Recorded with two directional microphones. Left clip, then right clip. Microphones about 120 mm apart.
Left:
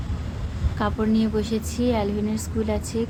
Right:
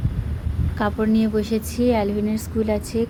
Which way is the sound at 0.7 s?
35° right (ahead or behind).